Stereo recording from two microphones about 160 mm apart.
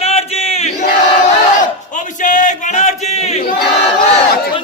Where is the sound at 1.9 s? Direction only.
50° left (ahead or behind).